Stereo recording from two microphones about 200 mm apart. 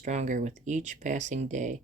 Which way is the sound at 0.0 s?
35° right (ahead or behind).